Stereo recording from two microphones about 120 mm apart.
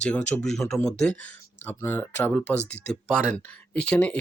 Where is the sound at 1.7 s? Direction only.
15° left (ahead or behind).